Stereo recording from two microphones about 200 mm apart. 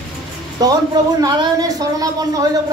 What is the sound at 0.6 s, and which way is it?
Speech, 20° right (ahead or behind).